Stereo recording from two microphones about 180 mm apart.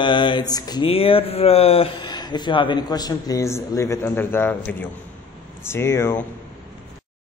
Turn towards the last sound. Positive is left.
turn(degrees=15)  # may be behind; listen again after turning